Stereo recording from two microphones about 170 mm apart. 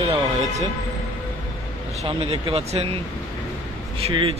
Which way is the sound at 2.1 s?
35° right (ahead or behind).